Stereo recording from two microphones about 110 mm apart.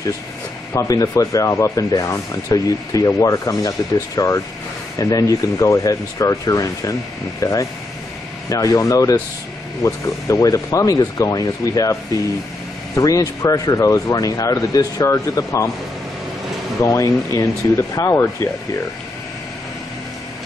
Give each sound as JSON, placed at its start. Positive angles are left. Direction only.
{"t": 0.7, "sound": "speech", "side_deg": 35}
{"t": 16.8, "sound": "speech", "side_deg": 30}